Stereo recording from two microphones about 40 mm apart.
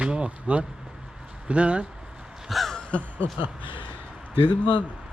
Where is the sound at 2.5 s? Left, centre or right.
Centre.